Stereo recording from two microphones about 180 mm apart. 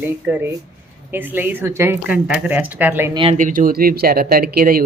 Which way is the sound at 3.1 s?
30° right (ahead or behind).